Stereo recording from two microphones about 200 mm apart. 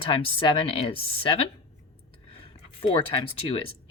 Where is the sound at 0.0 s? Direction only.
25° left (ahead or behind).